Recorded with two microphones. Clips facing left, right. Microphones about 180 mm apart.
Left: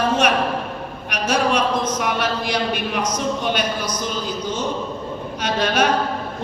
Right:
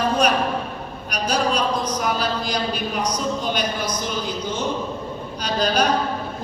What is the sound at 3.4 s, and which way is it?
Speech, 60° left (ahead or behind).